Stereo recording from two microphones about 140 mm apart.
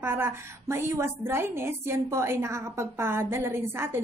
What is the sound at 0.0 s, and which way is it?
A woman's voice, 15° right (ahead or behind).